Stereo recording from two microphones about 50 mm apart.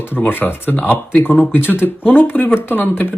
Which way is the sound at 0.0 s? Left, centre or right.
Left.